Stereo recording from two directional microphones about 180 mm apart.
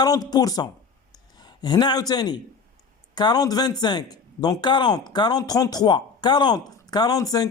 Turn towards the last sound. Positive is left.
turn(degrees=20)  # may be behind; listen again after turning